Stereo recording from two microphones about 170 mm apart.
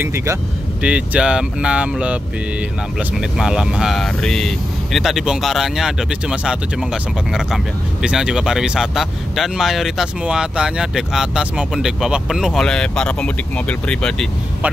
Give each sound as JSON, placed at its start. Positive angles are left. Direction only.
{"t": 0.0, "sound": "speech", "side_deg": -15}